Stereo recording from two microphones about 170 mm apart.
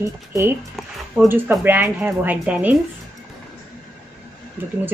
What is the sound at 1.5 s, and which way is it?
A woman's voice, 10° right (ahead or behind).